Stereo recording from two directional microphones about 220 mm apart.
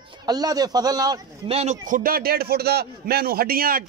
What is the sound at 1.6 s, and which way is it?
A man's voice, 35° right (ahead or behind).